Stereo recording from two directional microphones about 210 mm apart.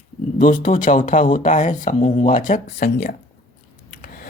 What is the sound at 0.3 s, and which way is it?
Speech, 40° left (ahead or behind).